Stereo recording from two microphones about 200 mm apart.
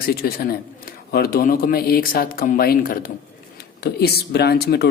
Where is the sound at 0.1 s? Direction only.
45° left (ahead or behind).